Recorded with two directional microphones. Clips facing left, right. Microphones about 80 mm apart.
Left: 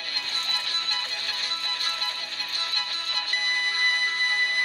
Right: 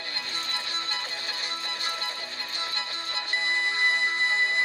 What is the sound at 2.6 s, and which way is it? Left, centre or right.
Music, right.